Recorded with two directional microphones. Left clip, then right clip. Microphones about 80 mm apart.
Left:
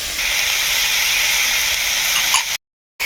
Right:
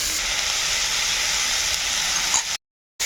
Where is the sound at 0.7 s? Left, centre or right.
Right.